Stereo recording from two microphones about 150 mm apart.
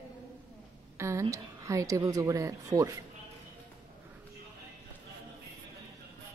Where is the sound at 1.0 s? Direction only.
20° right (ahead or behind).